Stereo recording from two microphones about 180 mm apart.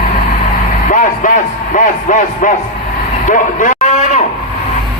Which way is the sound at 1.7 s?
45° left (ahead or behind).